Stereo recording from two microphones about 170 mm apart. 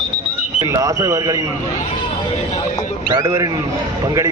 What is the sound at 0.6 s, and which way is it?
Speech, 20° right (ahead or behind).